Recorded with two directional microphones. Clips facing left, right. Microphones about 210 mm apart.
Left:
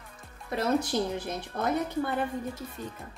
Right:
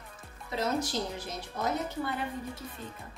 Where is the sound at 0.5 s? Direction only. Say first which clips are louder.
Left 4 dB; 55° left (ahead or behind).